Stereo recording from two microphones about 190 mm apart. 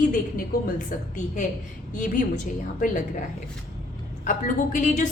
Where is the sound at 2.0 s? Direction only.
40° left (ahead or behind).